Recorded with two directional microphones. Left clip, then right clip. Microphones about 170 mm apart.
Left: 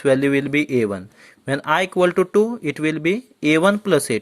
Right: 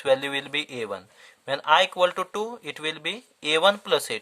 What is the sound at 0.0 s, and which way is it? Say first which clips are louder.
Speech: left 6 dB; 20° left (ahead or behind).